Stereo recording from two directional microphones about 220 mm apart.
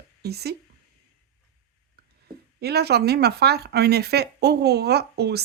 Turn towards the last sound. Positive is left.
turn(degrees=-50)  # may be behind; listen again after turning